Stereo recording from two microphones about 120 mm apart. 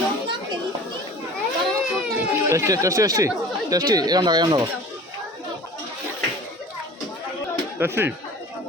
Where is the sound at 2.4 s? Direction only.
25° right (ahead or behind).